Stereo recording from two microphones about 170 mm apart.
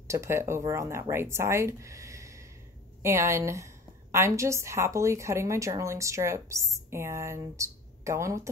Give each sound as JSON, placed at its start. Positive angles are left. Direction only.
{"t": 0.1, "sound": "a woman's voice", "side_deg": -15}